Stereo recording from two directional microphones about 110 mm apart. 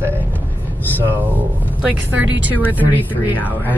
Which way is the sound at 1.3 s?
15° right (ahead or behind).